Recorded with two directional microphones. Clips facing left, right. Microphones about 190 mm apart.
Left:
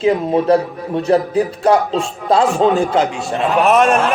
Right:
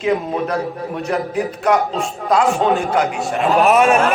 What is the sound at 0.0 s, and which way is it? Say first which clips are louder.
A man's voice: left 4 dB; 30° left (ahead or behind).